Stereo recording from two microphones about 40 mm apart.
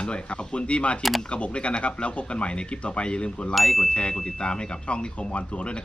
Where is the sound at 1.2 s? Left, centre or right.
Left.